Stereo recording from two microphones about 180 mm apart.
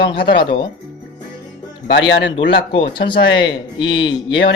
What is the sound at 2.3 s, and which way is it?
Speech, 30° left (ahead or behind).